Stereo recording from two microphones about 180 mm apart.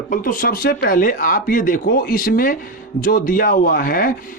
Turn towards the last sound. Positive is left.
turn(degrees=50)  # may be behind; listen again after turning